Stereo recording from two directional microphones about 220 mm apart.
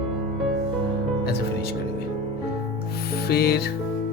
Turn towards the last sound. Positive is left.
turn(degrees=45)  # may be behind; listen again after turning